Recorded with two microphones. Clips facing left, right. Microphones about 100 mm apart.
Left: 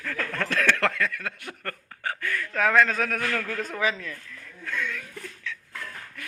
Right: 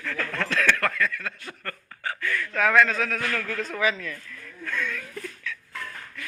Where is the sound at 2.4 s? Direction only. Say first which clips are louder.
Right 1 dB; 35° left (ahead or behind).